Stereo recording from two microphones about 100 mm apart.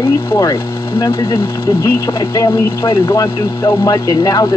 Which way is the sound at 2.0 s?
35° left (ahead or behind).